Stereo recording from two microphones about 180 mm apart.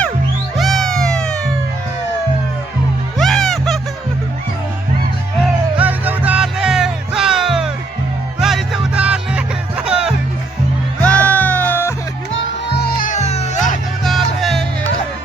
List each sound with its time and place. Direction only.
0.5 s cat: centre (ahead or behind)
3.2 s music: centre (ahead or behind)
5.4 s music: 10° right (ahead or behind)
11.0 s music: 5° left (ahead or behind)
12.3 s music: 65° left (ahead or behind)
13.1 s music: 40° left (ahead or behind)
14.0 s music: centre (ahead or behind)